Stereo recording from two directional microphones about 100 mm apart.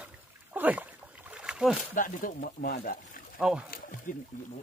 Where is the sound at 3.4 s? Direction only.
10° right (ahead or behind).